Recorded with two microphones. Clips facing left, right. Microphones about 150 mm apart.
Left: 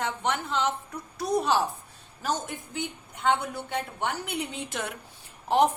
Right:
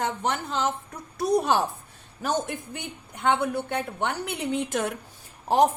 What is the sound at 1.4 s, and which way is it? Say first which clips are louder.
Speech: even; 50° right (ahead or behind).